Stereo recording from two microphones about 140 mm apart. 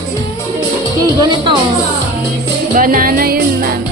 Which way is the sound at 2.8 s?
90° right.